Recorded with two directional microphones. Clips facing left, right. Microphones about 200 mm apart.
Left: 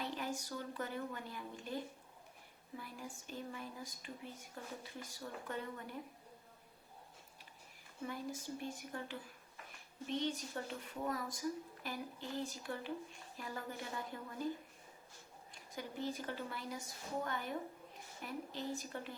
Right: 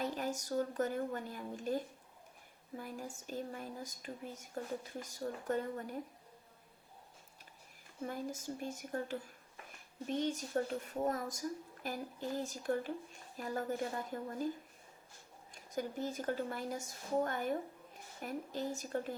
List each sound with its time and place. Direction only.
0.0 s speech: 45° right (ahead or behind)
8.0 s speech: 45° right (ahead or behind)
15.5 s speech: 45° right (ahead or behind)